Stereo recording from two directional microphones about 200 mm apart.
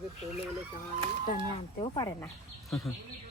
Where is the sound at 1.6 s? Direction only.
25° left (ahead or behind).